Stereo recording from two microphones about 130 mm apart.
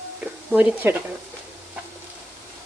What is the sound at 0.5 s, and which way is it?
Speech, 10° right (ahead or behind).